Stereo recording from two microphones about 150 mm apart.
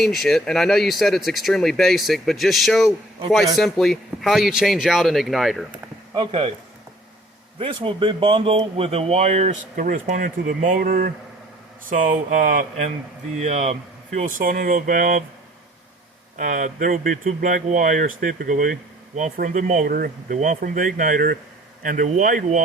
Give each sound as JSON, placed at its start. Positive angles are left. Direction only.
{"t": 0.0, "sound": "speech", "side_deg": 0}
{"t": 5.7, "sound": "a sound", "side_deg": -35}
{"t": 7.6, "sound": "speech", "side_deg": -35}
{"t": 9.7, "sound": "speech", "side_deg": -65}
{"t": 13.3, "sound": "speech", "side_deg": -50}
{"t": 16.4, "sound": "speech", "side_deg": -60}
{"t": 21.8, "sound": "speech", "side_deg": -60}